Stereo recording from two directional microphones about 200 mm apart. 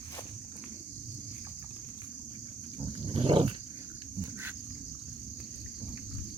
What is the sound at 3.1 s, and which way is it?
Wild animals, 25° right (ahead or behind).